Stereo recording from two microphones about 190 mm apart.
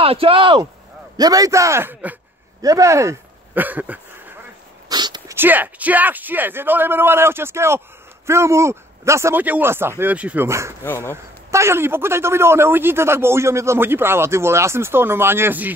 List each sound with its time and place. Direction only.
0.0 s a man's voice: 30° right (ahead or behind); by 4.0 s 10° right (ahead or behind)
4.8 s dog: 20° right (ahead or behind)
5.3 s a man's voice: 10° right (ahead or behind)